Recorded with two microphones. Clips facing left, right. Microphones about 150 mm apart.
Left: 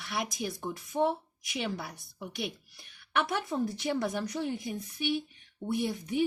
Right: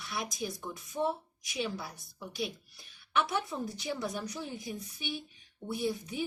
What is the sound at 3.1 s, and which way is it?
Speech, 60° left (ahead or behind).